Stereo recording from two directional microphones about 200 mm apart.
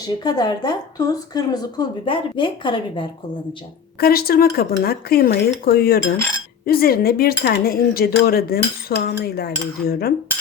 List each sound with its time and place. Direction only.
0.2 s speech: 20° left (ahead or behind)
4.0 s speech: 50° left (ahead or behind)